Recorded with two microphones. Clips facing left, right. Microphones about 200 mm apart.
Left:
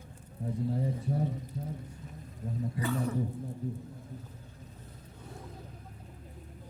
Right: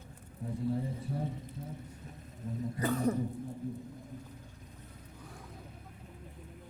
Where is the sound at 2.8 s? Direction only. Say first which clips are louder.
Right 3 dB; 40° right (ahead or behind).